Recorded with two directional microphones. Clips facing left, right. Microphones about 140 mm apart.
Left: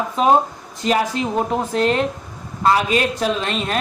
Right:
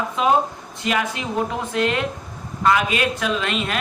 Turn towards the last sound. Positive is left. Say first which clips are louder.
# left 2 dB
turn(degrees=35)  # may be behind; listen again after turning